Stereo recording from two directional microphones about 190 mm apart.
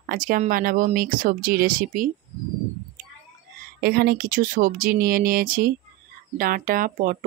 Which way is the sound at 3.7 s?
55° right (ahead or behind).